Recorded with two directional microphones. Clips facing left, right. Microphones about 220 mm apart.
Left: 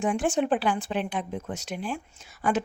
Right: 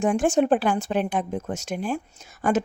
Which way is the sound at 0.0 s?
45° right (ahead or behind).